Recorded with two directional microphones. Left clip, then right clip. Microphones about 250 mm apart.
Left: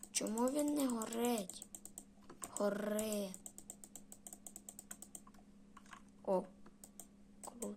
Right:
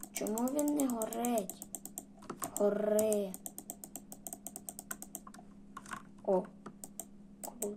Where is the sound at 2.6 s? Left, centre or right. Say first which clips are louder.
Right 8 dB; left.